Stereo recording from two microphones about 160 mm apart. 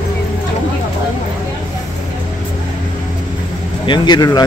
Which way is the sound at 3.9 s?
25° left (ahead or behind).